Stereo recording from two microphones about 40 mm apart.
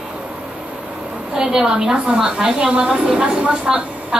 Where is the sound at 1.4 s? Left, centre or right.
Centre.